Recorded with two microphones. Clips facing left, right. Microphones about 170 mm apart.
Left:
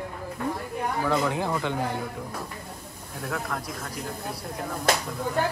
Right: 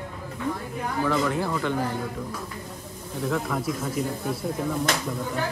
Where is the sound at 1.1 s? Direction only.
15° left (ahead or behind).